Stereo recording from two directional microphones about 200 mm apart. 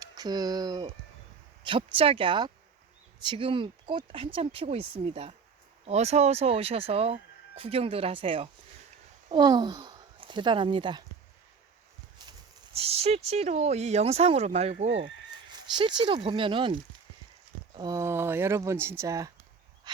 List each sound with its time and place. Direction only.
0.0 s speech: 20° right (ahead or behind)
12.2 s clip-clop: 20° right (ahead or behind)
12.7 s speech: 30° right (ahead or behind)
14.8 s speech: 70° right (ahead or behind)
15.4 s a sound: 25° right (ahead or behind)
16.0 s speech: 25° right (ahead or behind)